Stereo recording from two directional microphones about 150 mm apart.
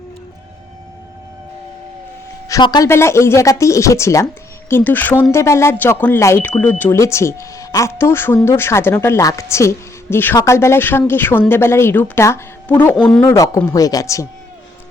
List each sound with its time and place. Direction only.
2.5 s a woman's voice: 30° left (ahead or behind); by 13.3 s 5° left (ahead or behind)
13.3 s speech: 20° left (ahead or behind)